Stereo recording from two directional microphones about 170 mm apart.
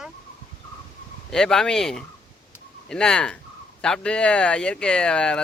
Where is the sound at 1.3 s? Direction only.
5° left (ahead or behind).